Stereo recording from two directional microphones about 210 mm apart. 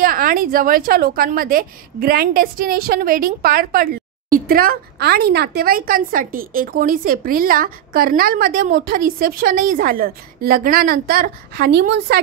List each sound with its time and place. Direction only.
0.0 s a woman's voice: 45° right (ahead or behind)